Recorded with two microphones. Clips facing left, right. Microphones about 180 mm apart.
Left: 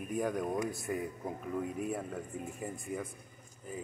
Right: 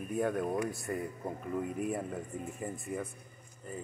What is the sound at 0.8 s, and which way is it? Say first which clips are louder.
A man's voice: even; centre (ahead or behind).